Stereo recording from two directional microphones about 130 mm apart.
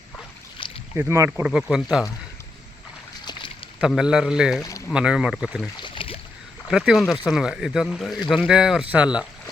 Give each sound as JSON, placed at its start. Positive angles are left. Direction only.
{"t": 0.6, "sound": "boat", "side_deg": 45}
{"t": 0.9, "sound": "speech", "side_deg": -20}
{"t": 1.3, "sound": "speech", "side_deg": -5}
{"t": 3.8, "sound": "speech", "side_deg": -5}
{"t": 5.7, "sound": "boat", "side_deg": 40}
{"t": 6.7, "sound": "speech", "side_deg": 0}